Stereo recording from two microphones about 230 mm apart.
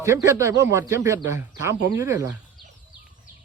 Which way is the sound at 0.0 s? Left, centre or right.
Centre.